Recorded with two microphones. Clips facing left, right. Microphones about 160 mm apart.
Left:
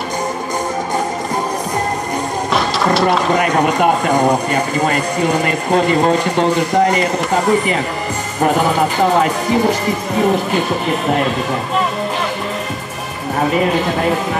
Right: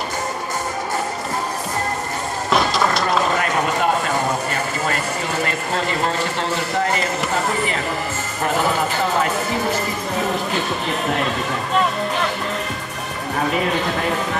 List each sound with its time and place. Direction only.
2.5 s music: centre (ahead or behind)
4.5 s speech: 15° left (ahead or behind)